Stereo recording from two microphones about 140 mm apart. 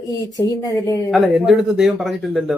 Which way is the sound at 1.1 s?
Centre (ahead or behind).